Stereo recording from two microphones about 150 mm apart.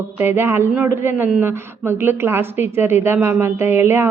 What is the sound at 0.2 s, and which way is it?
A woman's voice, 15° right (ahead or behind).